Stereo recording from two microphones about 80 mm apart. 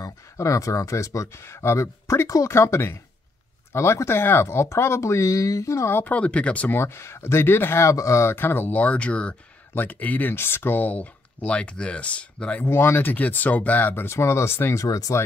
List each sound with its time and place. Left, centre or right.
0.0 s speech: left
5.9 s speech: centre
6.8 s speech: left